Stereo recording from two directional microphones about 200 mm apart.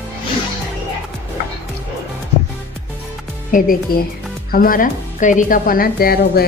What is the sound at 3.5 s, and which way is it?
A woman's voice, 45° left (ahead or behind).